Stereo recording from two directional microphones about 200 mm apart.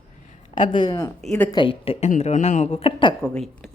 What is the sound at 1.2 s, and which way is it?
Speech, 5° left (ahead or behind).